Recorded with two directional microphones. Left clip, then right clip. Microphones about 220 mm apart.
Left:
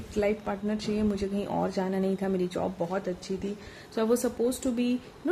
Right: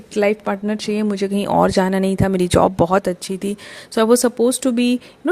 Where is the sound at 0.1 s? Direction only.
45° right (ahead or behind).